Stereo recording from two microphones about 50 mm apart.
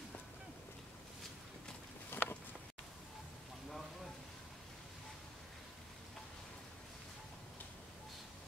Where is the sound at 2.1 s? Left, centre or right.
Left.